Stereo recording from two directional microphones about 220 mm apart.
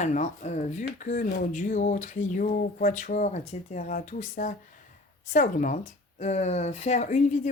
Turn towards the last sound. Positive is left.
turn(degrees=35)  # may be behind; listen again after turning